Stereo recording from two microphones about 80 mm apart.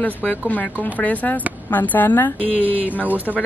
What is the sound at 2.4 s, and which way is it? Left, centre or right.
Speech, centre.